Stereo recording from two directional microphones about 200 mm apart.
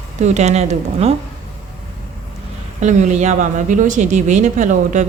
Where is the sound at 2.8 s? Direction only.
35° right (ahead or behind).